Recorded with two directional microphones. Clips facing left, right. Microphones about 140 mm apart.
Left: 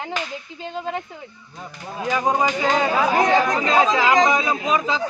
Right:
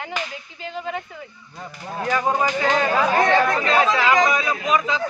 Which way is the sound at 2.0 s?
15° left (ahead or behind).